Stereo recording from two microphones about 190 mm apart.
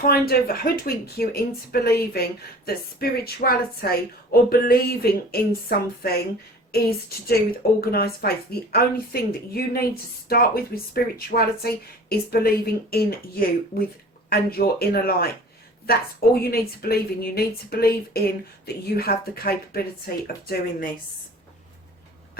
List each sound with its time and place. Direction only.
0.0 s speech: 55° left (ahead or behind)
7.8 s speech: 55° left (ahead or behind)